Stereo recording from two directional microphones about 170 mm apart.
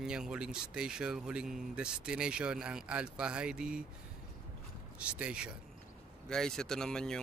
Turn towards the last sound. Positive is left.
turn(degrees=5)  # may be behind; listen again after turning